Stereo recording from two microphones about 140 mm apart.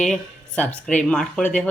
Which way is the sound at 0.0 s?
5° left (ahead or behind).